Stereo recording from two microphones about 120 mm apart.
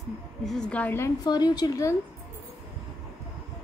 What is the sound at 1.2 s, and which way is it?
Speech, 35° left (ahead or behind).